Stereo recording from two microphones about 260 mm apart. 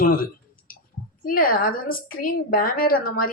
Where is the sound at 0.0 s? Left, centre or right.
Left.